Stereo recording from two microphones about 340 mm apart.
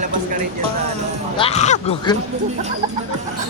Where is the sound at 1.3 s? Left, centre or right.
Centre.